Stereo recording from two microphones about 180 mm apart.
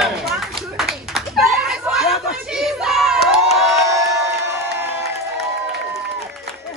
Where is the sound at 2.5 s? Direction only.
Centre (ahead or behind).